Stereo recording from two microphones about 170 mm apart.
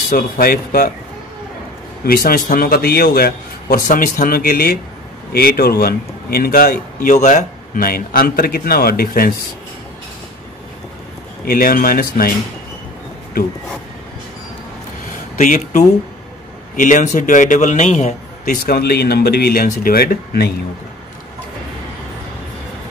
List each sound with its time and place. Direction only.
0.1 s speech: 60° left (ahead or behind)
2.0 s speech: 60° left (ahead or behind)
11.4 s speech: 60° left (ahead or behind)
15.3 s a man's voice: 45° left (ahead or behind)
18.7 s speech: 70° left (ahead or behind)